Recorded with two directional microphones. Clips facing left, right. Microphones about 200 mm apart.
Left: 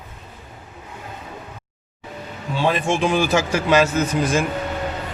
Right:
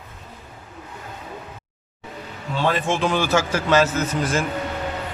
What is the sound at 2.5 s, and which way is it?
A man's voice, 15° left (ahead or behind).